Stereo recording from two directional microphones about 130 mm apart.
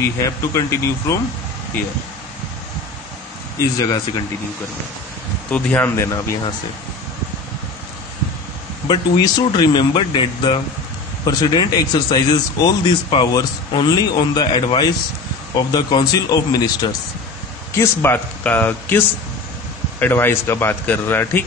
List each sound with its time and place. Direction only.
0.0 s speech: 25° left (ahead or behind)
5.5 s speech: 15° left (ahead or behind)
8.8 s speech: 35° left (ahead or behind)
17.7 s speech: 20° left (ahead or behind)